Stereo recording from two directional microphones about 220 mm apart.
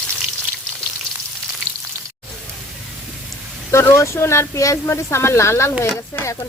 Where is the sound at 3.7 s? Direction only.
10° left (ahead or behind).